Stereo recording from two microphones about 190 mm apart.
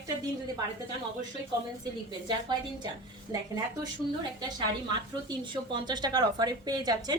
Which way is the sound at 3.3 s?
20° right (ahead or behind).